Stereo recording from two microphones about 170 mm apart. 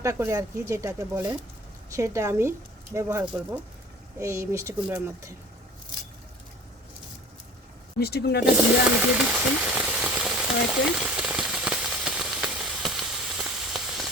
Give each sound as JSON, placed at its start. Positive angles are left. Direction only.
{"t": 0.0, "sound": "speech", "side_deg": -15}
{"t": 7.9, "sound": "speech", "side_deg": 65}
{"t": 9.0, "sound": "frying", "side_deg": -5}
{"t": 10.8, "sound": "a sound", "side_deg": -5}